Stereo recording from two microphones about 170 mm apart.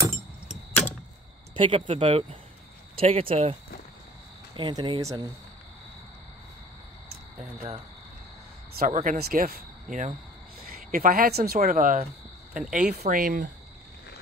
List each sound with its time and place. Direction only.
1.5 s speech: 30° right (ahead or behind)
4.6 s speech: 30° right (ahead or behind)
8.7 s speech: 50° right (ahead or behind)
9.2 s speech: 60° right (ahead or behind)
12.5 s speech: 5° right (ahead or behind)
12.9 s speech: 60° right (ahead or behind)